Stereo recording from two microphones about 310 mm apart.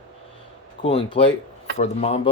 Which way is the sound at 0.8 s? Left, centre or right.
Centre.